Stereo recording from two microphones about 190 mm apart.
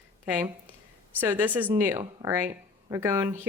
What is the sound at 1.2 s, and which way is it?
Speech, 10° right (ahead or behind).